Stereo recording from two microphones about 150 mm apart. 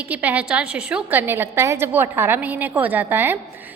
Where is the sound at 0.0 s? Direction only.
10° right (ahead or behind).